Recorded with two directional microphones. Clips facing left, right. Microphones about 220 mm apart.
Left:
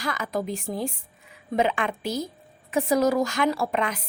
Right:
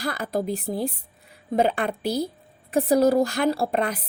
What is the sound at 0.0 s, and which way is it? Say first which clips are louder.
Speech: right 2 dB; 35° right (ahead or behind).